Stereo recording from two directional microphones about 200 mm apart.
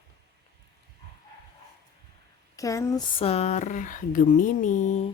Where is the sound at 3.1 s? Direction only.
30° left (ahead or behind).